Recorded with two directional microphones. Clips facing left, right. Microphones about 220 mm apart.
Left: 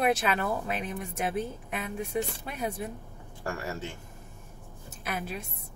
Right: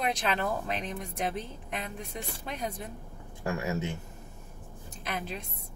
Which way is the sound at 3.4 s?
20° right (ahead or behind).